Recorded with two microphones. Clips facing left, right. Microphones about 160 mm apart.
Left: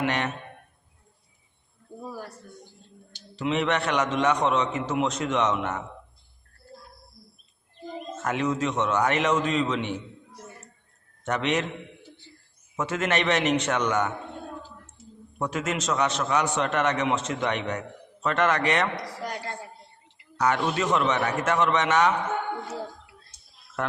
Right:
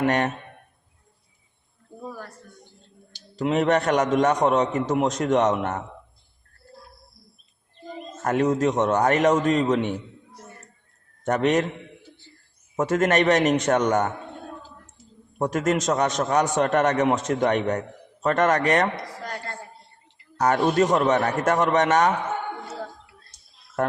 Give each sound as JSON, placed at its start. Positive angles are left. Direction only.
{"t": 0.0, "sound": "speech", "side_deg": -45}
{"t": 3.3, "sound": "a man's voice", "side_deg": -45}
{"t": 8.2, "sound": "a man's voice", "side_deg": -40}
{"t": 11.3, "sound": "a man's voice", "side_deg": -45}
{"t": 12.7, "sound": "a man's voice", "side_deg": -45}
{"t": 15.4, "sound": "a man's voice", "side_deg": -40}
{"t": 19.2, "sound": "speech", "side_deg": 15}
{"t": 20.4, "sound": "a man's voice", "side_deg": -45}